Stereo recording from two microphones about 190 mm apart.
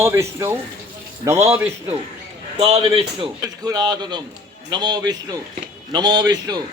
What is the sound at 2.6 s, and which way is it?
A man's voice, 30° right (ahead or behind).